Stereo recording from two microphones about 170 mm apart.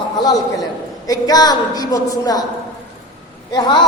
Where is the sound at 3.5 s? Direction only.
25° left (ahead or behind).